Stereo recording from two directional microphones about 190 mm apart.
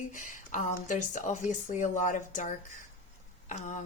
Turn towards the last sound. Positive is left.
turn(degrees=40)  # may be behind; listen again after turning